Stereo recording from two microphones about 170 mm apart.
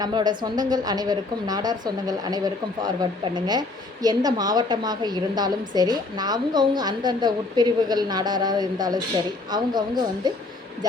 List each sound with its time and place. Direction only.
0.0 s a woman's voice: 25° right (ahead or behind)